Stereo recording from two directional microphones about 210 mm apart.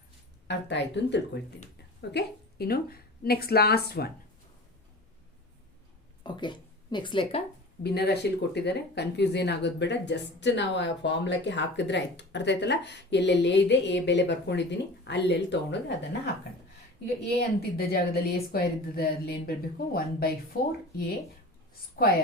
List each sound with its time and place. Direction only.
0.4 s a woman's voice: 55° left (ahead or behind)
6.2 s a woman's voice: 20° left (ahead or behind)
7.9 s speech: 50° left (ahead or behind)
17.6 s a woman's voice: 50° left (ahead or behind)